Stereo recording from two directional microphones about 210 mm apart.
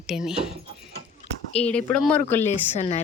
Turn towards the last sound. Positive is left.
turn(degrees=35)  # may be behind; listen again after turning